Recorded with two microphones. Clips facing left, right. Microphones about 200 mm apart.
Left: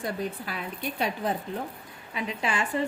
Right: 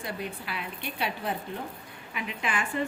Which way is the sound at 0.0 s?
45° left (ahead or behind).